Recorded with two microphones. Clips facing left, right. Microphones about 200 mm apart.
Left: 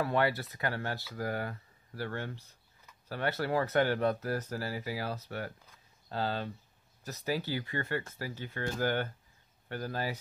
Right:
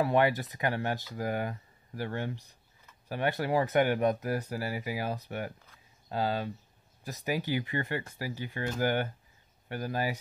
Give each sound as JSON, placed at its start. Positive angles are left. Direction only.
{"t": 0.0, "sound": "speech", "side_deg": -15}